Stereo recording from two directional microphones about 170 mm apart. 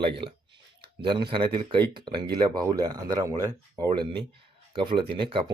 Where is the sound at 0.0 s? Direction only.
30° right (ahead or behind).